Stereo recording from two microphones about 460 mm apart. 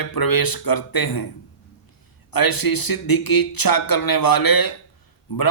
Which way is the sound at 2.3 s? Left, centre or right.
Left.